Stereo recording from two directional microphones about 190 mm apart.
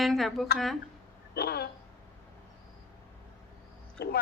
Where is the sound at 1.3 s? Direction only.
55° left (ahead or behind).